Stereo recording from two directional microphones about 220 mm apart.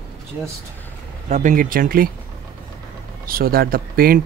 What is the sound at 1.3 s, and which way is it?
Speech, 35° right (ahead or behind).